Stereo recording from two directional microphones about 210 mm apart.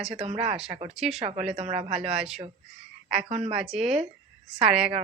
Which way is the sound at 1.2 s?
30° right (ahead or behind).